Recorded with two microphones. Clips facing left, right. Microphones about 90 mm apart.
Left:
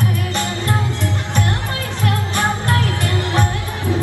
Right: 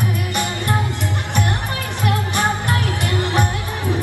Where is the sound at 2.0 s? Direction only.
20° right (ahead or behind).